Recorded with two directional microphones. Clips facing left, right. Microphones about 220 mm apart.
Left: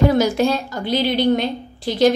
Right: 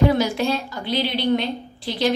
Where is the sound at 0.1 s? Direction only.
45° left (ahead or behind).